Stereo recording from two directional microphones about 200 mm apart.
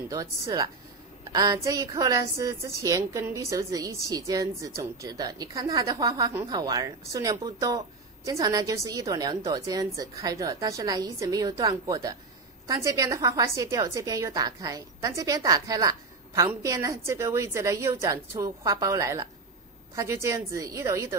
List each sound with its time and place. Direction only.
0.1 s a woman's voice: 20° right (ahead or behind)